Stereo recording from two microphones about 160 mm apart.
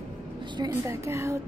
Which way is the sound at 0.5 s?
20° right (ahead or behind).